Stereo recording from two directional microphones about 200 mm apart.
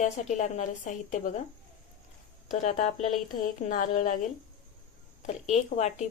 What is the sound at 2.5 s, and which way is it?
Speech, 40° left (ahead or behind).